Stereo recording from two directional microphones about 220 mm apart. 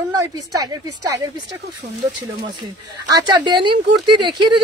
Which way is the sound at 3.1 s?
20° right (ahead or behind).